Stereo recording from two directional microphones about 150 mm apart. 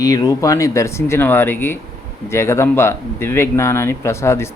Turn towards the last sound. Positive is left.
turn(degrees=15)  # may be behind; listen again after turning